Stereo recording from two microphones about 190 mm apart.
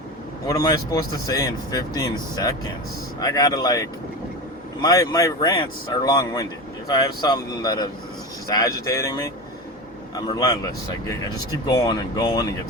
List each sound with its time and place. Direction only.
0.4 s speech: 20° left (ahead or behind)